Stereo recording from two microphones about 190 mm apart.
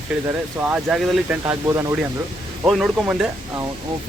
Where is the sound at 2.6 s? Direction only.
Centre (ahead or behind).